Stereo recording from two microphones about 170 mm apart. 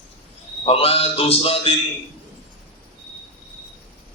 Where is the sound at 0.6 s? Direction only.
35° left (ahead or behind).